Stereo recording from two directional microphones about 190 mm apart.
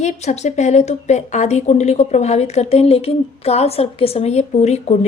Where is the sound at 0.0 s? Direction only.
40° left (ahead or behind).